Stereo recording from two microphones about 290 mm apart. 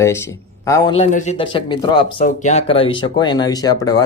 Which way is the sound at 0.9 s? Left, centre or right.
Left.